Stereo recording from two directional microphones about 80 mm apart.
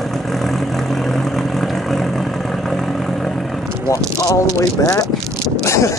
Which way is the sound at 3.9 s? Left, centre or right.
Left.